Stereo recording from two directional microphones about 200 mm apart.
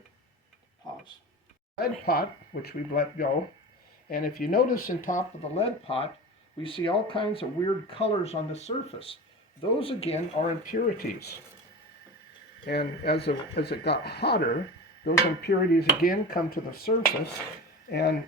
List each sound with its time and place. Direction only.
1.8 s speech: 50° left (ahead or behind)
12.7 s speech: 55° left (ahead or behind)